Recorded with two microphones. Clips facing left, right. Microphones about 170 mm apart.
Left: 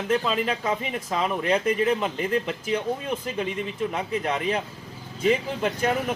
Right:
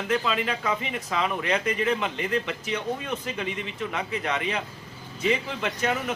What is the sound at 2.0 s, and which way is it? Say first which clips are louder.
Speech: left 2 dB; 40° left (ahead or behind).